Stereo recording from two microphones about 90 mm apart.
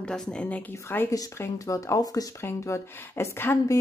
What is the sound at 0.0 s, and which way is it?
Speech, 10° left (ahead or behind).